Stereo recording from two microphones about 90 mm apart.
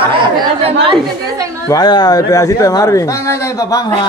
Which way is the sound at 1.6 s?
50° left (ahead or behind).